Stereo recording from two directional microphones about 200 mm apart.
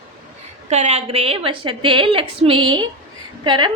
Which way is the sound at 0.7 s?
35° right (ahead or behind).